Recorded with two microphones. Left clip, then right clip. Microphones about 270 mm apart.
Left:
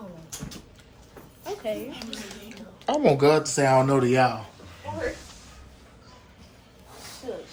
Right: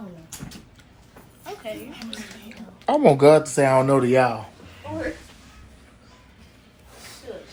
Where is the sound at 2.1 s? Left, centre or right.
Centre.